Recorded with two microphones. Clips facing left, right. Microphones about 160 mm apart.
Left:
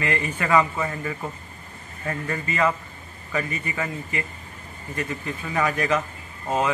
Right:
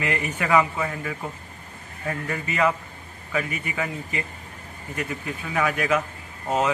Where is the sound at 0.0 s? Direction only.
15° right (ahead or behind).